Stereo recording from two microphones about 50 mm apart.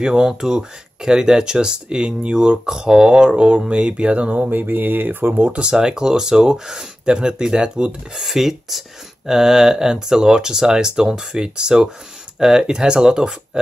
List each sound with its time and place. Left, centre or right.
0.0 s speech: centre; by 5.6 s right
5.6 s speech: centre
8.2 s speech: centre